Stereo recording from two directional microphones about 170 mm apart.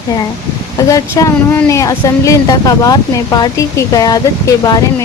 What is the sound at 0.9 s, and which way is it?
Speech, 20° left (ahead or behind).